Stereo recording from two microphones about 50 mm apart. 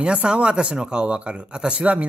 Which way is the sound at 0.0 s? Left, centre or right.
Right.